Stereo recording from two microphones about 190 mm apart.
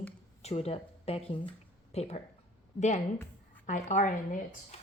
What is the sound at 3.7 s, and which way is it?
Speech, 40° left (ahead or behind).